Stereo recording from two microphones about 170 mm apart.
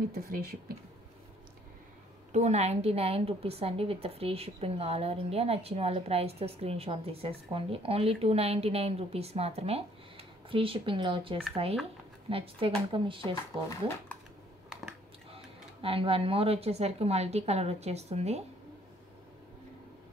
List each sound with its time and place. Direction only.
0.1 s speech: 60° right (ahead or behind)
2.3 s a woman's voice: 40° right (ahead or behind)
15.3 s a woman's voice: 35° right (ahead or behind)